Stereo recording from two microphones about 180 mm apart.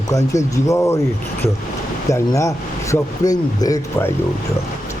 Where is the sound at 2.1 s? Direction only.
15° left (ahead or behind).